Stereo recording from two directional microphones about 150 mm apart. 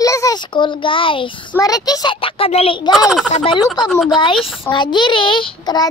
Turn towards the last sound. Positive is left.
turn(degrees=30)  # may be behind; listen again after turning